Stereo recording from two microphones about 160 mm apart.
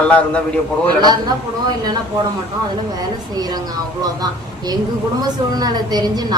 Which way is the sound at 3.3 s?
25° right (ahead or behind).